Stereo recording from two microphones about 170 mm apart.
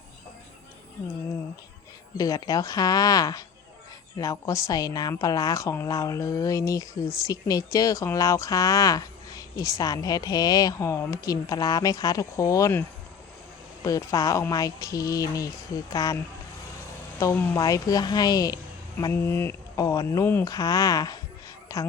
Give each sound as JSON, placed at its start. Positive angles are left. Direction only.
{"t": 2.1, "sound": "speech", "side_deg": 20}
{"t": 13.8, "sound": "speech", "side_deg": 20}
{"t": 17.2, "sound": "speech", "side_deg": 15}